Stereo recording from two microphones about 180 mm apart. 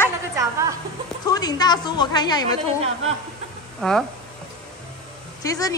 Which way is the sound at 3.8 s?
Centre (ahead or behind).